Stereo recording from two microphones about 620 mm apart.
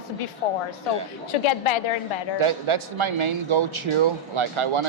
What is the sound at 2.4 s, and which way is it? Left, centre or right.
A man's voice, right.